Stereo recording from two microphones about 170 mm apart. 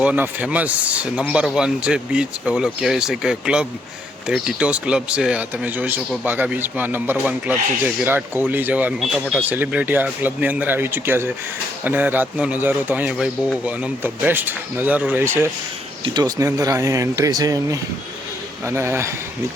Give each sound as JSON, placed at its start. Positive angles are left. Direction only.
{"t": 0.0, "sound": "speech", "side_deg": -10}